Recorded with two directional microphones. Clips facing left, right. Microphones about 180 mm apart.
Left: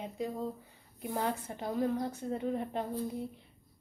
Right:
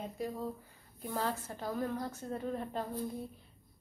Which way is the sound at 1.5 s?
20° left (ahead or behind).